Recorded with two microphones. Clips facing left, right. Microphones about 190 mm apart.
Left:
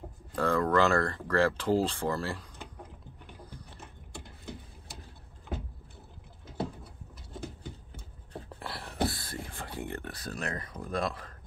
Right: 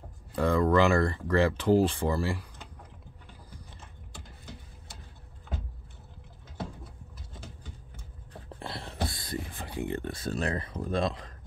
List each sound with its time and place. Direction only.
0.4 s speech: 15° right (ahead or behind)
8.5 s beatboxing: 25° right (ahead or behind)
9.1 s a sound: 15° right (ahead or behind)